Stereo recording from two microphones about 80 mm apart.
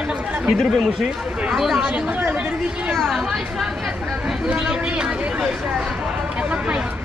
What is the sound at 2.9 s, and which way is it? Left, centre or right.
Speech, centre.